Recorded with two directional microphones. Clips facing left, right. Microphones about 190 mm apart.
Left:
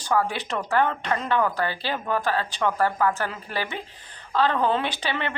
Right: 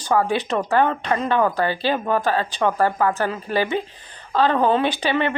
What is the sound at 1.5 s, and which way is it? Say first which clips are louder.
Speech: right 6 dB; 15° right (ahead or behind).